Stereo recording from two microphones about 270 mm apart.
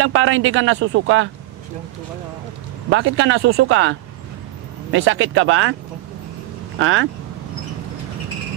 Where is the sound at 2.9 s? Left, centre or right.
Right.